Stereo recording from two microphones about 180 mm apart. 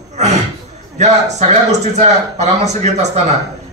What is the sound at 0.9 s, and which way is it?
A man's voice, 40° right (ahead or behind).